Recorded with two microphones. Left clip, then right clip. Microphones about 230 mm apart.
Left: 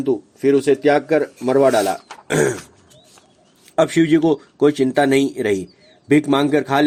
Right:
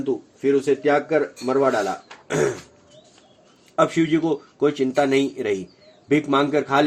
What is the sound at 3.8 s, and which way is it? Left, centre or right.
A man's voice, left.